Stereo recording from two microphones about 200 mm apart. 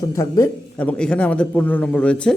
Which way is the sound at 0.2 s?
10° left (ahead or behind).